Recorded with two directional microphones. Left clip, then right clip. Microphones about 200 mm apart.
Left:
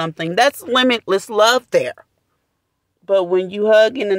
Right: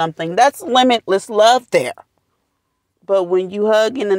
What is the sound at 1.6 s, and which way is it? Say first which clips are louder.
Speech: right 1 dB; 15° right (ahead or behind).